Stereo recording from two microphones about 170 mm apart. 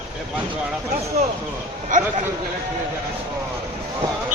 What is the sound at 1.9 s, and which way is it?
Speech, 50° right (ahead or behind).